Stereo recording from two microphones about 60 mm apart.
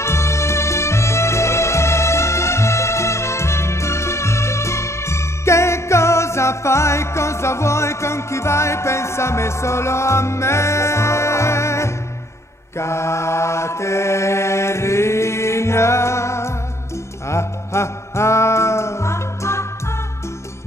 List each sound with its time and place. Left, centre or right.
0.0 s music: left
12.7 s mantra: left
17.3 s music: left